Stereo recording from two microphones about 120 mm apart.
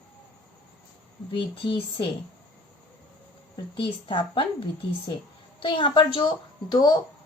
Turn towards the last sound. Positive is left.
turn(degrees=35)  # may be behind; listen again after turning